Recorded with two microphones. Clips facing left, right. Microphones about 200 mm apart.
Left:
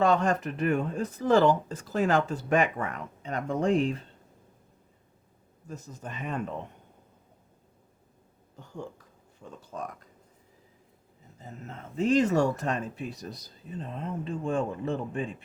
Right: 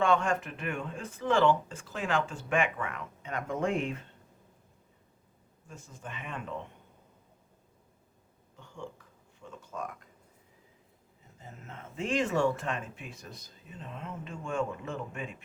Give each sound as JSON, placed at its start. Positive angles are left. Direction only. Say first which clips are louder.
{"t": 0.0, "sound": "speech", "louder": "left 3 dB", "side_deg": 40}
{"t": 5.6, "sound": "speech", "louder": "left 5 dB", "side_deg": 40}
{"t": 8.5, "sound": "speech", "louder": "left 4 dB", "side_deg": 40}
{"t": 11.4, "sound": "speech", "louder": "left 4 dB", "side_deg": 35}